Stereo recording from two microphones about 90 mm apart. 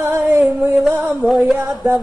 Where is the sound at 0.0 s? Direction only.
20° right (ahead or behind).